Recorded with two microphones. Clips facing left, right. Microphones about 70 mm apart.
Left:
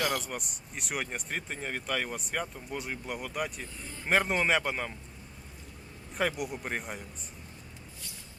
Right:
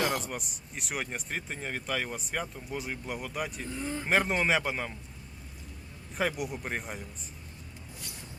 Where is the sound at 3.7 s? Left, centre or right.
Right.